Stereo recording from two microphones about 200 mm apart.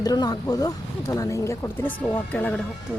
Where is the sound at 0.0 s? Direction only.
20° left (ahead or behind).